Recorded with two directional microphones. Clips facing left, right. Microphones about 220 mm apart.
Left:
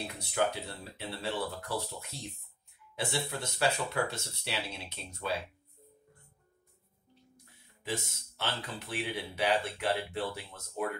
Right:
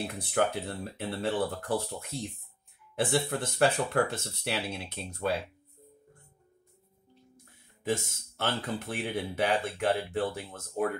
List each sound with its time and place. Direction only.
0.0 s speech: 50° right (ahead or behind)
7.8 s speech: 50° right (ahead or behind)